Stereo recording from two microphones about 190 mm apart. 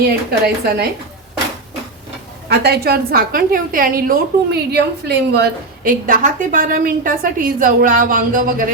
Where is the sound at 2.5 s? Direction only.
60° right (ahead or behind).